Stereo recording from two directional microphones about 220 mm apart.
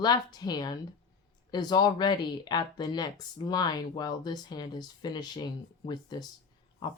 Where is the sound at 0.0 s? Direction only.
20° left (ahead or behind).